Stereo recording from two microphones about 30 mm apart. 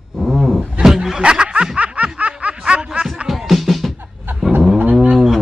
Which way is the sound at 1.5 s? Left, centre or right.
Right.